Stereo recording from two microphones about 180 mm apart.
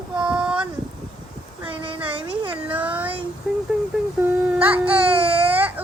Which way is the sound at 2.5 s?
10° right (ahead or behind).